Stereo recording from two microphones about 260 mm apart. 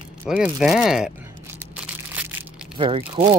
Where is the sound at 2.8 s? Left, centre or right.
Centre.